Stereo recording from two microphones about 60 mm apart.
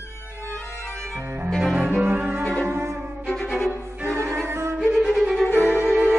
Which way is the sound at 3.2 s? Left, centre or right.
Centre.